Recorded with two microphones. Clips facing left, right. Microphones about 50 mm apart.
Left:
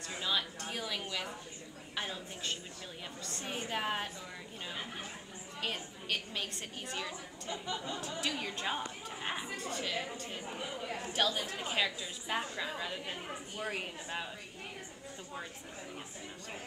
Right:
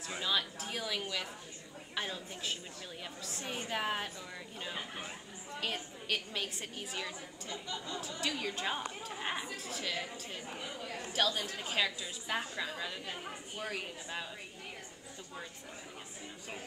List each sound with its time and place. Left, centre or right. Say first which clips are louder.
0.0 s a woman's voice: right 1 dB; centre
5.6 s a woman's voice: even; centre
7.6 s a woman's voice: left 2 dB; centre
8.1 s a woman's voice: right 2 dB; centre
11.1 s a woman's voice: even; centre
13.7 s a woman's voice: left 2 dB; centre